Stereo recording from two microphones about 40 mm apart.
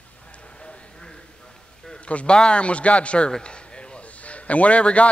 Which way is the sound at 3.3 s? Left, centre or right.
Left.